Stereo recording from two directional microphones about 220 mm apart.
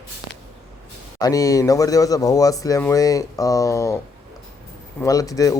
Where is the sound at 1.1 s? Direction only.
15° left (ahead or behind).